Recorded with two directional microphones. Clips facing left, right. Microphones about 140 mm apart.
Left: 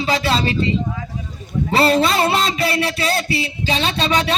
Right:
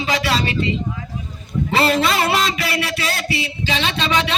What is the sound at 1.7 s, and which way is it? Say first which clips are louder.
Speech: left 2 dB; 30° left (ahead or behind).